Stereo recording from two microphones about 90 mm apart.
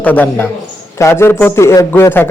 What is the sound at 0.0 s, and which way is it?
Speech, 20° left (ahead or behind).